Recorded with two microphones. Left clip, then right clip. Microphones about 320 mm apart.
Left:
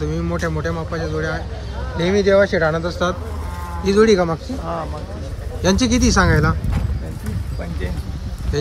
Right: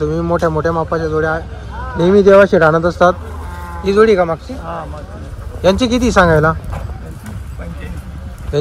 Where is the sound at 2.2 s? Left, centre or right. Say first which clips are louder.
Right 7 dB; right.